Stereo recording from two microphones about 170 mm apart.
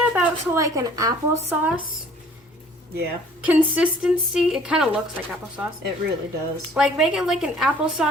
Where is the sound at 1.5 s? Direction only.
10° right (ahead or behind).